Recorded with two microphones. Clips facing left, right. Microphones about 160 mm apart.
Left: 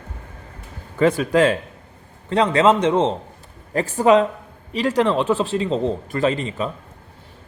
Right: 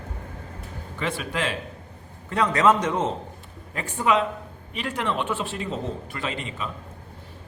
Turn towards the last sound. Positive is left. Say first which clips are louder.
# left 10 dB
turn(degrees=35)  # may be behind; listen again after turning